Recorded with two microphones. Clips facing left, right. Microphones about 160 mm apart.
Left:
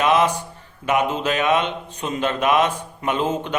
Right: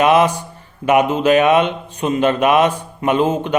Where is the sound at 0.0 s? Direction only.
60° right (ahead or behind).